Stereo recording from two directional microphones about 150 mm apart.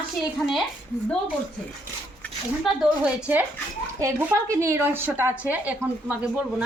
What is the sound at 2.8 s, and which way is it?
A woman's voice, 10° right (ahead or behind).